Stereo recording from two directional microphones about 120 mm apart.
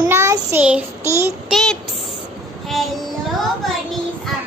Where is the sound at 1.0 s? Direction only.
25° right (ahead or behind).